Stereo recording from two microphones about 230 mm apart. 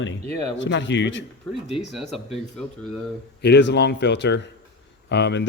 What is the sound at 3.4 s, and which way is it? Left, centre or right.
A man's voice, left.